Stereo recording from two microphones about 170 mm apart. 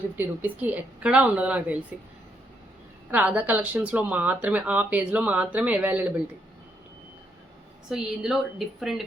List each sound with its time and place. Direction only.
0.2 s speech: 10° right (ahead or behind)
3.1 s speech: 10° right (ahead or behind)
7.9 s a woman's voice: 5° right (ahead or behind)